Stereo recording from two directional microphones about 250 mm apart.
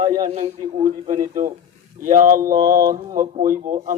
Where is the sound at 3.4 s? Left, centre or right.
Right.